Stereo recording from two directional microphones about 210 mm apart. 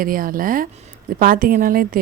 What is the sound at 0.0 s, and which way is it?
A woman's voice, 40° right (ahead or behind).